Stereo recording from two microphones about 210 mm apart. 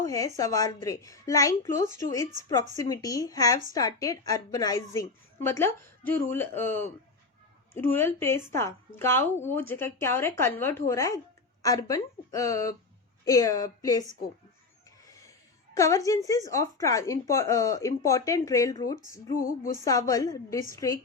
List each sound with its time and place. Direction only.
0.0 s a woman's voice: 15° left (ahead or behind)
19.4 s music: 45° left (ahead or behind)
19.8 s speech: 15° left (ahead or behind)